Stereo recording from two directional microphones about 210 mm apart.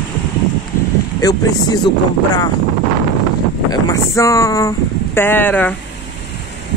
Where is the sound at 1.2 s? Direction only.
15° left (ahead or behind).